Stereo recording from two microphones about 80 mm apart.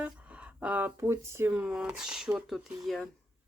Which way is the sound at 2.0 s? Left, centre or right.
Centre.